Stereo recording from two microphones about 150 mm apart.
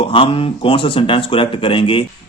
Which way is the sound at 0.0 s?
35° left (ahead or behind).